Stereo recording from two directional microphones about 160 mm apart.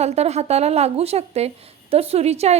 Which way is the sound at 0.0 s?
40° right (ahead or behind).